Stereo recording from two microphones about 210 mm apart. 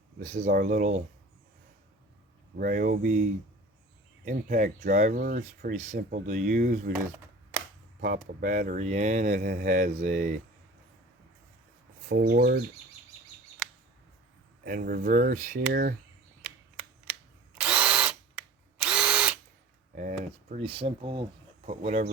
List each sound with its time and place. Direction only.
0.2 s speech: 35° right (ahead or behind)
2.6 s speech: 40° right (ahead or behind)
4.3 s speech: 40° right (ahead or behind)
8.0 s speech: 45° right (ahead or behind)
12.2 s speech: 45° right (ahead or behind)
14.6 s speech: 45° right (ahead or behind)
16.4 s drill: 5° right (ahead or behind)
20.0 s a sound: 40° right (ahead or behind)
20.6 s speech: 25° right (ahead or behind)